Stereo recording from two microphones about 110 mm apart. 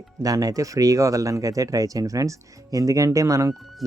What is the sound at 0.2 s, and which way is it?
Speech, 35° right (ahead or behind).